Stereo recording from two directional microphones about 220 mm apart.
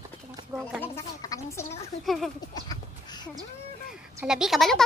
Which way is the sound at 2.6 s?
20° left (ahead or behind).